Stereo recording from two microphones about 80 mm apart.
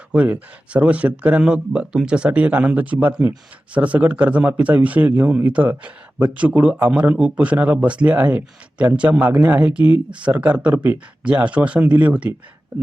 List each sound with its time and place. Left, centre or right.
0.1 s speech: centre